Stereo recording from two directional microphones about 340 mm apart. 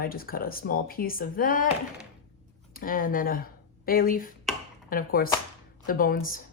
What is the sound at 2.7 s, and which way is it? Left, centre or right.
A woman's voice, left.